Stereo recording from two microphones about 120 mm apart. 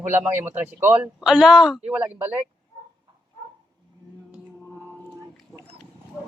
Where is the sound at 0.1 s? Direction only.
20° right (ahead or behind).